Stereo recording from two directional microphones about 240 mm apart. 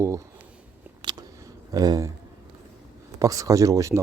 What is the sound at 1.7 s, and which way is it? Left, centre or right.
Speech, centre.